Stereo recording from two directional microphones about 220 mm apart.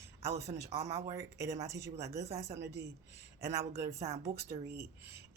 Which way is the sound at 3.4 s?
15° right (ahead or behind).